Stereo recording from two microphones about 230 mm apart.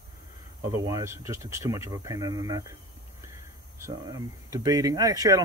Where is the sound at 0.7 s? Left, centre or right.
Centre.